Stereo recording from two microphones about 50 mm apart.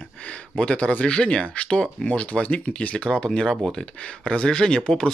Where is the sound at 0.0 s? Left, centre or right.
Left.